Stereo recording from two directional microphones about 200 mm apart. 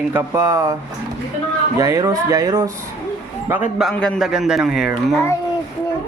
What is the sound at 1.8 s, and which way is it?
Speech, 15° right (ahead or behind).